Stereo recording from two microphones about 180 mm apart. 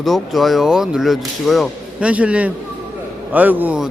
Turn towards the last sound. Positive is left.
turn(degrees=-5)  # may be behind; listen again after turning